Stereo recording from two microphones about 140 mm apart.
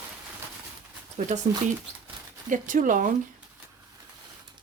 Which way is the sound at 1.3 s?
55° right (ahead or behind).